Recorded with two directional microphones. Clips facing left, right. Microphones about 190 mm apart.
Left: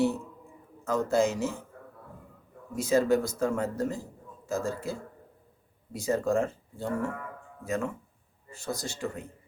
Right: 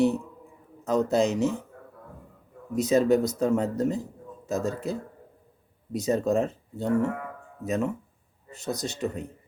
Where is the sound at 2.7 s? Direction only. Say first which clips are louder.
Right 3 dB; 20° right (ahead or behind).